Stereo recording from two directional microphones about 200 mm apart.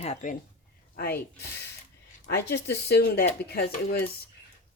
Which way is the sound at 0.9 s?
50° left (ahead or behind).